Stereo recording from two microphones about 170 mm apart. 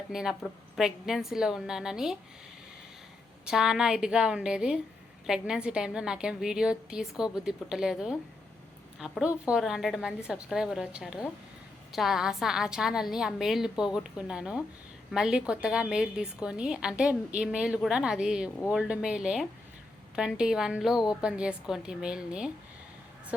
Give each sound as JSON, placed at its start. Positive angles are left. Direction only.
{"t": 0.1, "sound": "a woman's voice", "side_deg": -5}
{"t": 3.4, "sound": "a woman's voice", "side_deg": -5}